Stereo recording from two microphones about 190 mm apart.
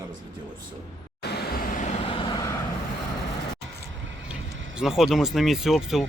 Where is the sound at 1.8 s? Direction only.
40° left (ahead or behind); by 2.5 s 20° left (ahead or behind).